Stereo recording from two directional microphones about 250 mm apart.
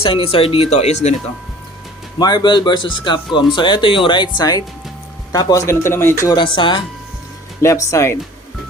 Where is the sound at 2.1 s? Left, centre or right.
Centre.